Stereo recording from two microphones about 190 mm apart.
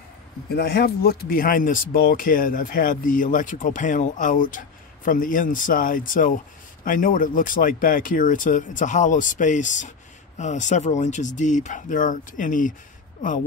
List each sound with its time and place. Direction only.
0.6 s speech: 60° left (ahead or behind)